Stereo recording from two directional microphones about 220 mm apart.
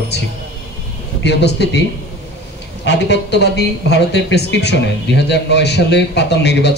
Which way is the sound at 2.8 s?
50° left (ahead or behind).